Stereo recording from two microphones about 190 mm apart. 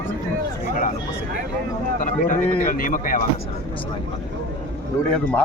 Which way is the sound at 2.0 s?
45° left (ahead or behind).